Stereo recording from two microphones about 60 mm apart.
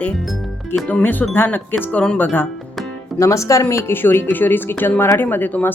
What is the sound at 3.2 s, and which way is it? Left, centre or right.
Music, left.